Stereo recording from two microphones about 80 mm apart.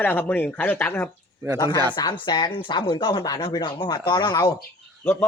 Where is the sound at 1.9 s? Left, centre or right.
Left.